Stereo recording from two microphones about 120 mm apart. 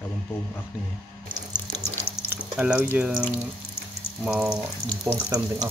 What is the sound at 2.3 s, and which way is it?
Speech, 15° right (ahead or behind).